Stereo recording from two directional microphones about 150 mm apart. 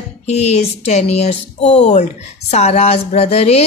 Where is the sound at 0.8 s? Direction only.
45° left (ahead or behind).